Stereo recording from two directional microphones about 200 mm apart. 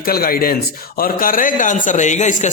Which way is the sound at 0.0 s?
50° left (ahead or behind).